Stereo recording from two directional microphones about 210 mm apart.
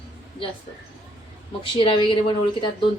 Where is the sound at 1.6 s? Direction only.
25° left (ahead or behind).